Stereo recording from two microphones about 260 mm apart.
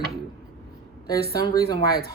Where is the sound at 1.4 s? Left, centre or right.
Centre.